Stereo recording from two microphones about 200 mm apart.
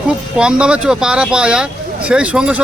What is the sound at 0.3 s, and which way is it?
A man's voice, 5° right (ahead or behind).